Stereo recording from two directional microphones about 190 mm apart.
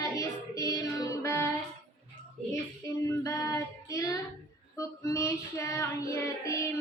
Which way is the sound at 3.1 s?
15° left (ahead or behind).